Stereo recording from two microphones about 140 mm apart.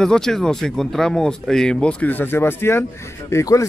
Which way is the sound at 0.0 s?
5° left (ahead or behind).